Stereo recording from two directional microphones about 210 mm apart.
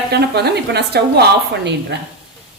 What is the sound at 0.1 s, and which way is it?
A woman's voice, 50° right (ahead or behind).